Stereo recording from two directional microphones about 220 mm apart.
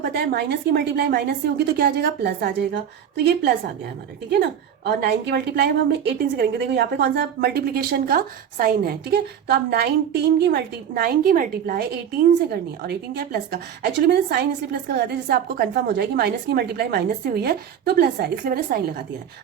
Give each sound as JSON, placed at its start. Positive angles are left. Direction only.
{"t": 0.0, "sound": "a woman's voice", "side_deg": -50}
{"t": 4.9, "sound": "a woman's voice", "side_deg": -45}